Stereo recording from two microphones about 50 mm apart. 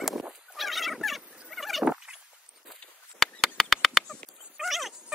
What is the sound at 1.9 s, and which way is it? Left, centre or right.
Dog, centre.